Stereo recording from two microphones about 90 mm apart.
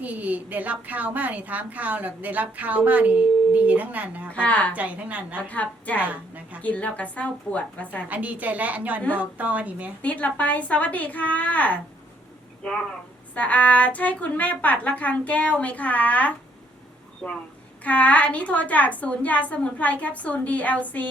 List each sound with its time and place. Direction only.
0.0 s a woman's voice: 20° right (ahead or behind)
4.3 s a woman's voice: 15° left (ahead or behind)
4.7 s a woman's voice: 15° right (ahead or behind)
5.4 s a woman's voice: 15° left (ahead or behind)
6.1 s a woman's voice: 15° right (ahead or behind)
6.6 s a woman's voice: 15° left (ahead or behind)
8.1 s a woman's voice: 15° right (ahead or behind)
10.0 s a woman's voice: 15° left (ahead or behind)
17.8 s a woman's voice: 15° left (ahead or behind)